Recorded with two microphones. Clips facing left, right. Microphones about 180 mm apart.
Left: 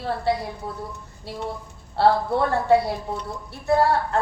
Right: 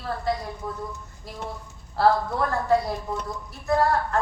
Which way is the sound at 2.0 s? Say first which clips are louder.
Left 2 dB; 30° left (ahead or behind).